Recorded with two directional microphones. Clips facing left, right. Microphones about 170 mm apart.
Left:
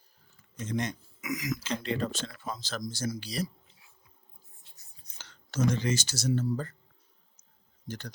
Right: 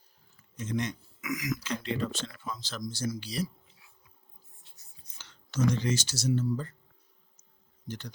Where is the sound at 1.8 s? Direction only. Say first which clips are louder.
Left 1 dB; 40° left (ahead or behind).